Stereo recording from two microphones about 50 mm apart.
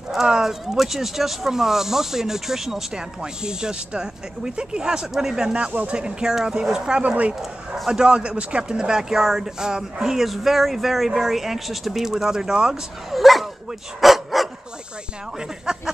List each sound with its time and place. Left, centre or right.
0.1 s speech: centre
5.7 s speech: right
5.9 s speech: centre
7.0 s speech: right
13.1 s dog: centre
15.3 s speech: centre